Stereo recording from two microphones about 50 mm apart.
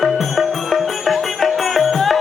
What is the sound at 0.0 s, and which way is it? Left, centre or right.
Music, centre.